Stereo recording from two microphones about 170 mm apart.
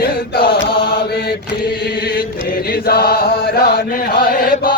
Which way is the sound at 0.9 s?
65° left (ahead or behind).